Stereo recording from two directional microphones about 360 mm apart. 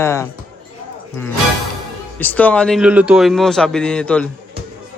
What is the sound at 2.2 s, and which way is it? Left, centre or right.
A man's voice, centre.